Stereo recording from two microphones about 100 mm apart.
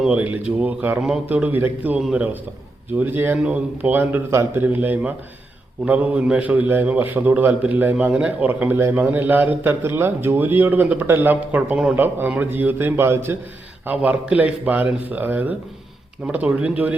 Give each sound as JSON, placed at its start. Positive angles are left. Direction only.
{"t": 0.0, "sound": "speech", "side_deg": -10}
{"t": 2.0, "sound": "a man's voice", "side_deg": -5}
{"t": 3.0, "sound": "a man's voice", "side_deg": -20}